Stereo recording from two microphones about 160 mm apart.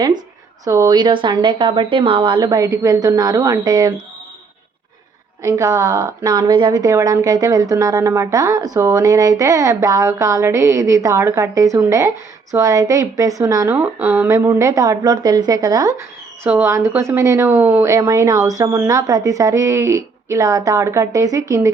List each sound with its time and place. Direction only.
0.6 s a woman's voice: 20° right (ahead or behind)
5.4 s a woman's voice: 20° right (ahead or behind)